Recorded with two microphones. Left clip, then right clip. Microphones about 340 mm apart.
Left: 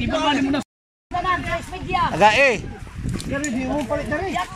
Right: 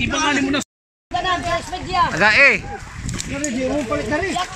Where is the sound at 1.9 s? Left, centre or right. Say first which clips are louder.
Even; left.